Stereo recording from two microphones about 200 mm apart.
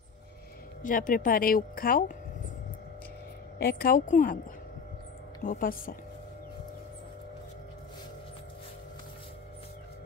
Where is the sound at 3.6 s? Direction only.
50° left (ahead or behind).